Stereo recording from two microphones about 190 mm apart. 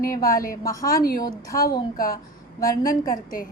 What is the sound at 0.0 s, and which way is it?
Speech, 50° left (ahead or behind).